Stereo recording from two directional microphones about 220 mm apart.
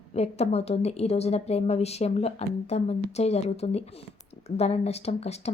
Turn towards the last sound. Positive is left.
turn(degrees=30)  # may be behind; listen again after turning